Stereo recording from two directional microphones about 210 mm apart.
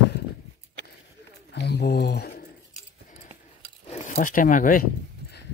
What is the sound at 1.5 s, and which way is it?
Speech, 55° left (ahead or behind).